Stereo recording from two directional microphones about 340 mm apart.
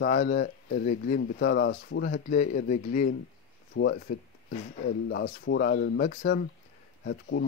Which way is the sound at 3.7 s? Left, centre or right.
Left.